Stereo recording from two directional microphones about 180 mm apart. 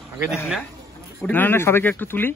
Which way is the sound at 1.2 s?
10° left (ahead or behind).